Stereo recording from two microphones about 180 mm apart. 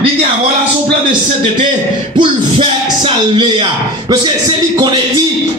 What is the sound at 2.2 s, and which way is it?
Speech, 25° right (ahead or behind).